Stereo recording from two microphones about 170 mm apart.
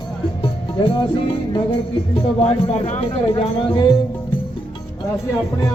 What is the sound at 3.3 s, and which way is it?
Speech, 25° left (ahead or behind).